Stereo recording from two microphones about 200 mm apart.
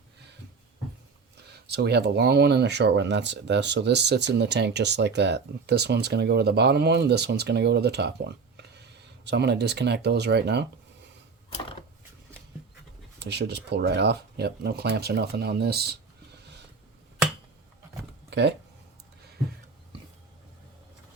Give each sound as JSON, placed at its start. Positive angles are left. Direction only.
{"t": 1.7, "sound": "speech", "side_deg": -55}
{"t": 13.1, "sound": "speech", "side_deg": -60}
{"t": 18.3, "sound": "a sound", "side_deg": -55}